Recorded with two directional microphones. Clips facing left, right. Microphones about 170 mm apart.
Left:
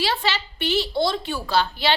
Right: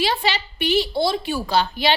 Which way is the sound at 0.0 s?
15° right (ahead or behind).